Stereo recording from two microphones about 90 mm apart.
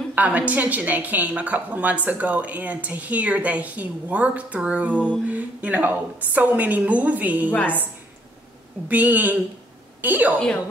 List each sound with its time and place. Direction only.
0.1 s a woman's voice: 15° right (ahead or behind)
7.5 s a woman's voice: 15° left (ahead or behind)
8.8 s speech: 20° right (ahead or behind)